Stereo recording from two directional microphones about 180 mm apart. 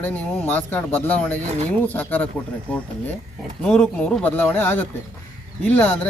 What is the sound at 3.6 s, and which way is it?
Speech, 5° left (ahead or behind).